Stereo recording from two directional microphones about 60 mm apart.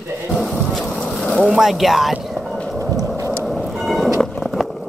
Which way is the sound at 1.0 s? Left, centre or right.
Centre.